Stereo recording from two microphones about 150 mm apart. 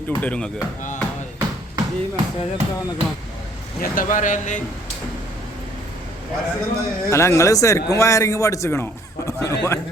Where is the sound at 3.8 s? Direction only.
65° left (ahead or behind).